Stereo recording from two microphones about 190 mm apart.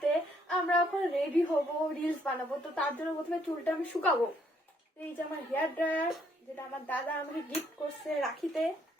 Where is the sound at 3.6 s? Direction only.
10° left (ahead or behind).